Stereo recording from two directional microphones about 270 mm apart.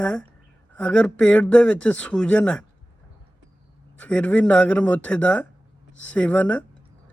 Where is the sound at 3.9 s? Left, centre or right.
Centre.